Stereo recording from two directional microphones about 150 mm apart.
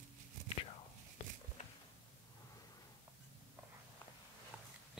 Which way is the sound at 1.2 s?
40° left (ahead or behind).